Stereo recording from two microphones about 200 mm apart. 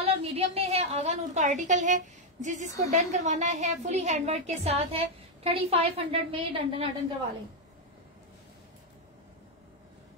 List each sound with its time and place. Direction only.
0.0 s a woman's voice: 30° right (ahead or behind)